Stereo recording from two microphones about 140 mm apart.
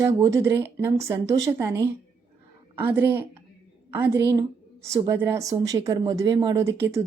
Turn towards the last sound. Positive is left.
turn(degrees=-20)  # may be behind; listen again after turning